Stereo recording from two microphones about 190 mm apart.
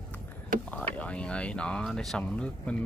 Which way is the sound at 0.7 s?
5° left (ahead or behind).